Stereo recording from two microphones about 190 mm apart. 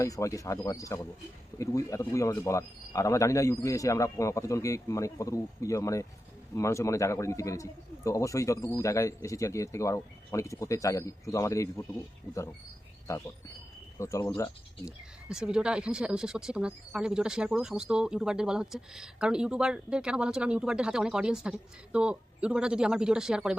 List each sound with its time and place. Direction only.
0.0 s a man's voice: 15° left (ahead or behind)
13.1 s a man's voice: 20° left (ahead or behind)
14.8 s speech: 5° right (ahead or behind)